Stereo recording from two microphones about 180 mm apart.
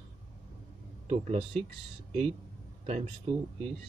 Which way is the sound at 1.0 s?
35° right (ahead or behind).